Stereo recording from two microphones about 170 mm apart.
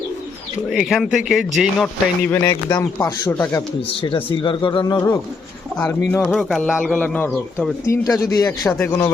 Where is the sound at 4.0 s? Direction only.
30° left (ahead or behind).